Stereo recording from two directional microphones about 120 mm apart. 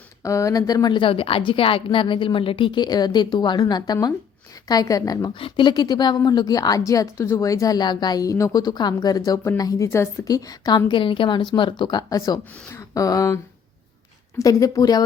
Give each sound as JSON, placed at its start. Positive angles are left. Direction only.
{"t": 0.2, "sound": "a woman's voice", "side_deg": 25}
{"t": 5.4, "sound": "a woman's voice", "side_deg": 45}